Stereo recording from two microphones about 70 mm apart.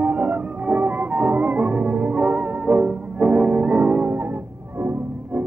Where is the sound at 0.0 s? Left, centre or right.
Right.